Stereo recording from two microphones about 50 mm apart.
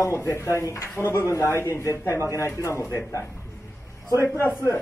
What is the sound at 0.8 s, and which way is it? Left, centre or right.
Speech, left.